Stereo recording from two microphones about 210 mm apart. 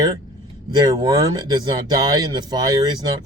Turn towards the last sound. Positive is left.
turn(degrees=-20)  # may be behind; listen again after turning